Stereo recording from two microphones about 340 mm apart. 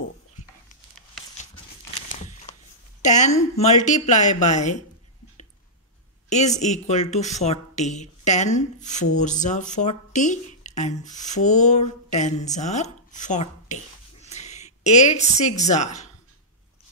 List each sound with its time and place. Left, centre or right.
3.0 s speech: left
6.2 s speech: centre